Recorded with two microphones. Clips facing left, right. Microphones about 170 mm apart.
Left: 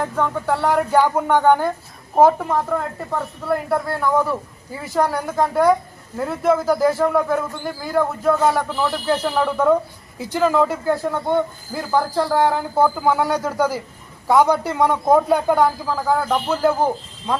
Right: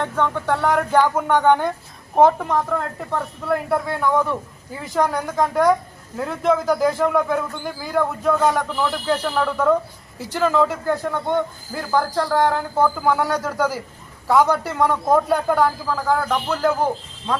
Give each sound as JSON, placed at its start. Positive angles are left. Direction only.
{"t": 0.0, "sound": "speech", "side_deg": 5}